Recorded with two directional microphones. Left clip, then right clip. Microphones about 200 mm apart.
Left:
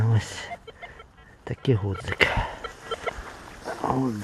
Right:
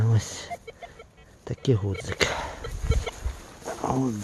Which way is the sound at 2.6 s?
80° right.